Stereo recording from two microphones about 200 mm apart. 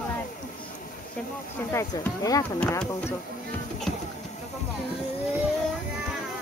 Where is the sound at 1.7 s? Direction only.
15° left (ahead or behind).